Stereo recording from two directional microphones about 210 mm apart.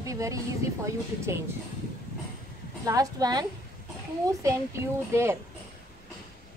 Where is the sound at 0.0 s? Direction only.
15° right (ahead or behind).